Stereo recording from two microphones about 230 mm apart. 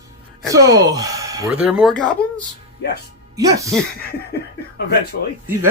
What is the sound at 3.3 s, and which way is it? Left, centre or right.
Speech, centre.